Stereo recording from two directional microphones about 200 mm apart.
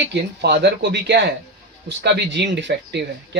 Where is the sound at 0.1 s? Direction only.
55° right (ahead or behind).